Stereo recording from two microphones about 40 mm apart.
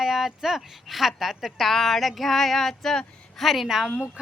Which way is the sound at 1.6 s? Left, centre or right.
Centre.